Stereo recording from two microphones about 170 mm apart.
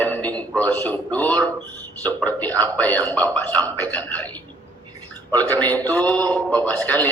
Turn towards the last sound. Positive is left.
turn(degrees=10)  # may be behind; listen again after turning